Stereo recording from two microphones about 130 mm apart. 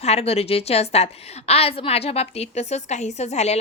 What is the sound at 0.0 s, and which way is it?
A woman's voice, 55° left (ahead or behind).